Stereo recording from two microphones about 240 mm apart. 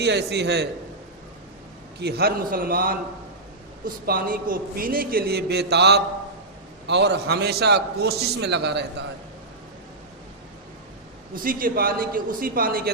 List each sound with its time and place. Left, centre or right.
0.0 s a man's voice: right
2.0 s a man's voice: right
11.4 s a man's voice: right